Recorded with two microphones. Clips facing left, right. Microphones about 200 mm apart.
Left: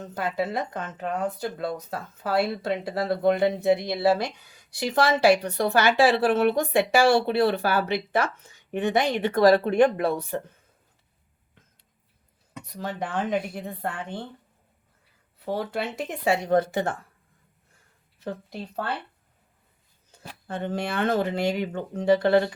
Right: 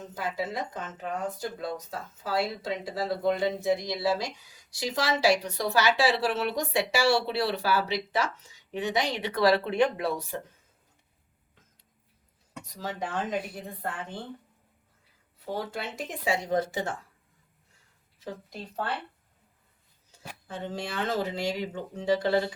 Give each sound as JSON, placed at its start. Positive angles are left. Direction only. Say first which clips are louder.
{"t": 0.0, "sound": "speech", "louder": "left 5 dB", "side_deg": 60}
{"t": 12.6, "sound": "speech", "louder": "left 3 dB", "side_deg": 60}
{"t": 15.4, "sound": "speech", "louder": "left 5 dB", "side_deg": 60}
{"t": 18.2, "sound": "speech", "louder": "left 5 dB", "side_deg": 60}
{"t": 20.5, "sound": "speech", "louder": "left 6 dB", "side_deg": 60}